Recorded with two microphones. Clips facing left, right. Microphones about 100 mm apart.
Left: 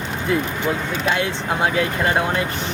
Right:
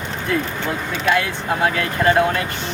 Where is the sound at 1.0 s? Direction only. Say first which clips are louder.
Right 3 dB; 25° left (ahead or behind).